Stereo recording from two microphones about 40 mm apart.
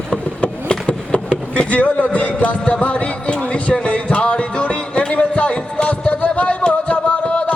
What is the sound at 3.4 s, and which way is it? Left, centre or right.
Music, left.